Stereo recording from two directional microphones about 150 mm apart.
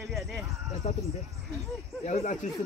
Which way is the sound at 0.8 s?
45° left (ahead or behind).